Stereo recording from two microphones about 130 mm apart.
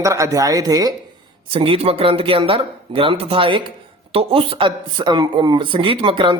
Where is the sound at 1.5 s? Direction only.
45° right (ahead or behind).